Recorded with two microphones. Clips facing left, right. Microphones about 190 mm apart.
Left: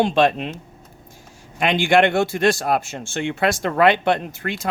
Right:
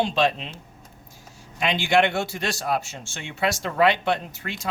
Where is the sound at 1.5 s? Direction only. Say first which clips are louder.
Left 4 dB; 55° left (ahead or behind).